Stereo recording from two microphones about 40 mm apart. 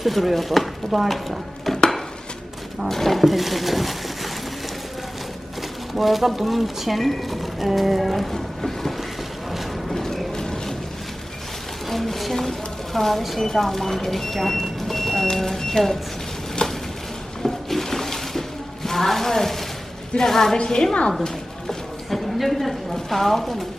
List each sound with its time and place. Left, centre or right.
0.0 s speech: centre
2.9 s roaring cats: centre
5.9 s speech: centre
9.9 s a sound: centre
11.9 s a woman's voice: centre
16.6 s a sound: left
17.4 s music: centre
20.1 s speech: centre
22.4 s a woman's voice: centre